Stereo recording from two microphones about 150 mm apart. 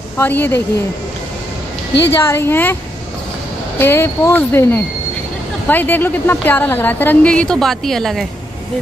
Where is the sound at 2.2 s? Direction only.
15° left (ahead or behind).